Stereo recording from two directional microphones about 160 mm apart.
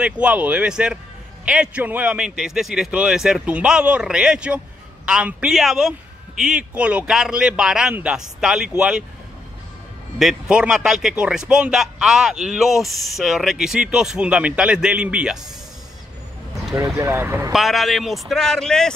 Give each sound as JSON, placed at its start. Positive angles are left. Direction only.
{"t": 0.0, "sound": "speech", "side_deg": -10}
{"t": 10.1, "sound": "speech", "side_deg": -5}
{"t": 16.7, "sound": "speech", "side_deg": -20}
{"t": 17.5, "sound": "speech", "side_deg": 0}